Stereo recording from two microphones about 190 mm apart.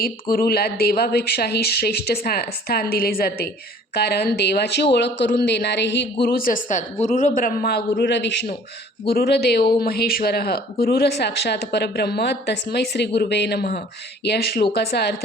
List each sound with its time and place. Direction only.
0.0 s speech: 50° left (ahead or behind)
6.2 s a man's voice: 50° left (ahead or behind)